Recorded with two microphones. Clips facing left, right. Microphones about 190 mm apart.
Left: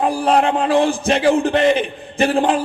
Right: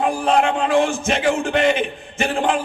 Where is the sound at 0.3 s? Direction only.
35° left (ahead or behind).